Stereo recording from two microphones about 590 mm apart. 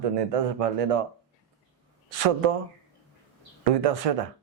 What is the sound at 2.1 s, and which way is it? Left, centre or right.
Speech, right.